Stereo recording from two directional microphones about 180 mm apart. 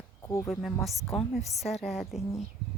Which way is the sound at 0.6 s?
Centre (ahead or behind).